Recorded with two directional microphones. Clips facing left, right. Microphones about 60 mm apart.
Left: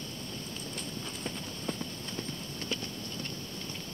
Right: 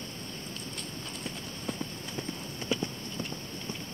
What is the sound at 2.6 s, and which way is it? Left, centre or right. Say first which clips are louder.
Clip-clop: right 5 dB; centre.